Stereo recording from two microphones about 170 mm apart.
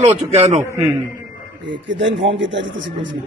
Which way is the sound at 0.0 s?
40° right (ahead or behind).